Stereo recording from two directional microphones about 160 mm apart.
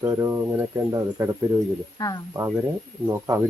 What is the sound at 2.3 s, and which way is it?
Speech, 20° right (ahead or behind).